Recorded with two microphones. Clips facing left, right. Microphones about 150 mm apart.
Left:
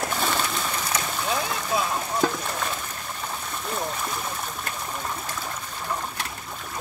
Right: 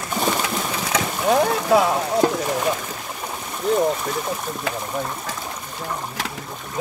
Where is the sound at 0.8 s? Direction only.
75° right (ahead or behind).